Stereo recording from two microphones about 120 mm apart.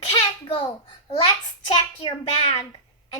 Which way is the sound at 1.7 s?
40° left (ahead or behind).